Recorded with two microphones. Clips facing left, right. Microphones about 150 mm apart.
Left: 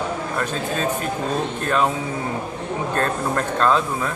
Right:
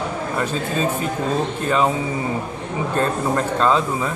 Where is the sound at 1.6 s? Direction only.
5° right (ahead or behind).